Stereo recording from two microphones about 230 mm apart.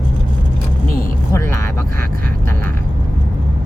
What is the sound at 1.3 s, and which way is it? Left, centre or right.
Speech, centre.